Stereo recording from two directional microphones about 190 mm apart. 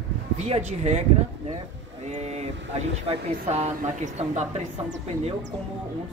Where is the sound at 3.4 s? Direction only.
35° right (ahead or behind).